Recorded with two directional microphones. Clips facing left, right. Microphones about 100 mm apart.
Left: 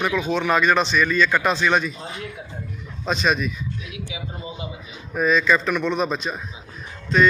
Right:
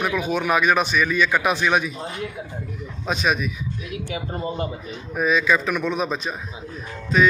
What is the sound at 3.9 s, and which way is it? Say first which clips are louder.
Speech: right 5 dB; 50° right (ahead or behind).